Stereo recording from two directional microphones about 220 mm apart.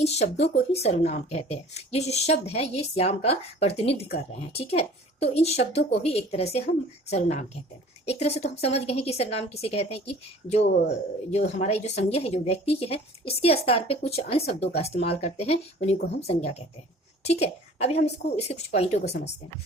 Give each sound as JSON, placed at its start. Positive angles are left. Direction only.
{"t": 0.0, "sound": "speech", "side_deg": 30}